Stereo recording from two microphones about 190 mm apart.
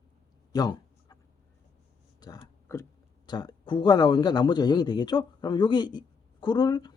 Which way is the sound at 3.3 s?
20° left (ahead or behind).